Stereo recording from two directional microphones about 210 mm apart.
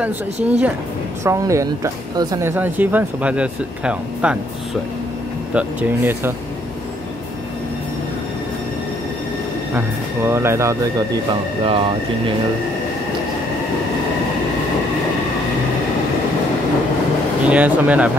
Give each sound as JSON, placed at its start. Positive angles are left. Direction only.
{"t": 0.5, "sound": "speech", "side_deg": -5}
{"t": 5.5, "sound": "speech", "side_deg": -5}
{"t": 9.8, "sound": "speech", "side_deg": -10}
{"t": 11.6, "sound": "speech", "side_deg": -25}
{"t": 17.5, "sound": "speech", "side_deg": -5}